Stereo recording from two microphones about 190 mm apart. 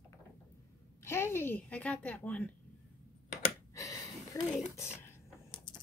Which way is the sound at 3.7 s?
20° left (ahead or behind).